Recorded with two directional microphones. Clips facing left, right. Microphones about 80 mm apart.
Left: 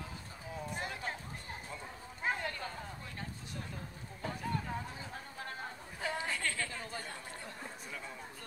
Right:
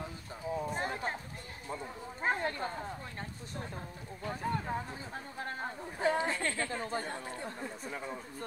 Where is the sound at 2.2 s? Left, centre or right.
Right.